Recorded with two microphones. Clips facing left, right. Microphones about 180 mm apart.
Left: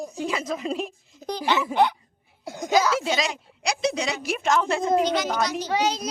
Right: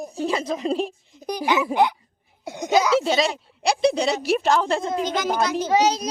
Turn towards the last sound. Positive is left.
turn(degrees=-15)  # may be behind; listen again after turning